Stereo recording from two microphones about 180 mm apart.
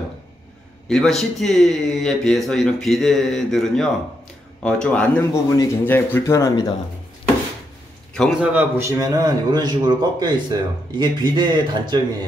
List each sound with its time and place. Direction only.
0.8 s speech: centre (ahead or behind); by 6.7 s 20° left (ahead or behind)
8.1 s a man's voice: centre (ahead or behind); by 12.0 s 25° right (ahead or behind)